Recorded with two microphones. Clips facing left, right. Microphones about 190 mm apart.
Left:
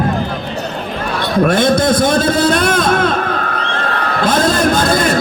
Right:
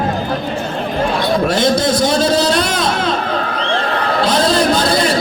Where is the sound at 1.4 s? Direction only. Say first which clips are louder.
Left 5 dB; 55° left (ahead or behind).